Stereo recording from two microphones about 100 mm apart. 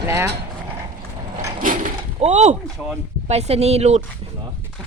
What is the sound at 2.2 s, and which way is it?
Speech, 80° right.